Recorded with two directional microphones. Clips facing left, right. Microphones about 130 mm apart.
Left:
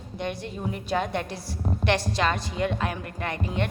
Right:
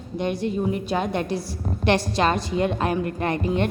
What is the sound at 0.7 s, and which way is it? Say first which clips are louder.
A woman's voice: right 3 dB; 20° right (ahead or behind).